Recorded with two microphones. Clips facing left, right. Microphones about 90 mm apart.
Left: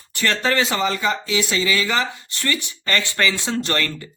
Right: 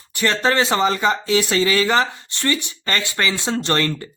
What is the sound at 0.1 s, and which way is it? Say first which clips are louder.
Speech: right 2 dB; 20° right (ahead or behind).